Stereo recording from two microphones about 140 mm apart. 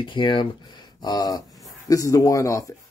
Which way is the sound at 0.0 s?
35° left (ahead or behind).